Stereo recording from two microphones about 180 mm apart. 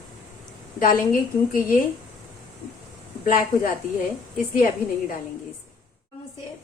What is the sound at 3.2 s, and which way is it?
Speech, 50° left (ahead or behind).